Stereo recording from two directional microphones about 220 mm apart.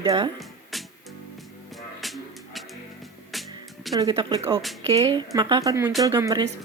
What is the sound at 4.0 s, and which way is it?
Speech, 20° right (ahead or behind).